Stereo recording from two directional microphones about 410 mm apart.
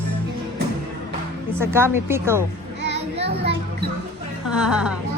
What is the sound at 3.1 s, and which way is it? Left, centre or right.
Music, centre.